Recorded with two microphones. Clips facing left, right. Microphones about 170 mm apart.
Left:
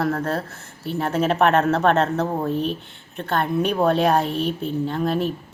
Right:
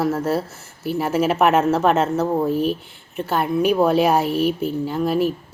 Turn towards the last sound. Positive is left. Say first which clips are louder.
# right 2 dB
turn(degrees=-5)  # may be behind; listen again after turning